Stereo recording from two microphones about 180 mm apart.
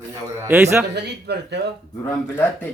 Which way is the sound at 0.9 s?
65° right (ahead or behind).